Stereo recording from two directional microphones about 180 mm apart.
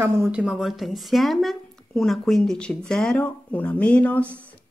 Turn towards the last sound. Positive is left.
turn(degrees=5)  # may be behind; listen again after turning